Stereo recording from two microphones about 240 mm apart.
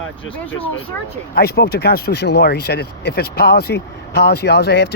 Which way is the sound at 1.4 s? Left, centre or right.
Left.